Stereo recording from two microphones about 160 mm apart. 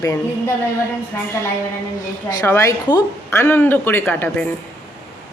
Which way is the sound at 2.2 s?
20° left (ahead or behind).